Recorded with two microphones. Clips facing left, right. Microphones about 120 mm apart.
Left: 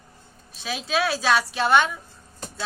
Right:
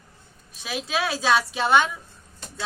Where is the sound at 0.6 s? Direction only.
10° right (ahead or behind).